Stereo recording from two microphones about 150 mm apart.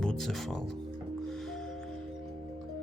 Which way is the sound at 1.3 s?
Centre (ahead or behind).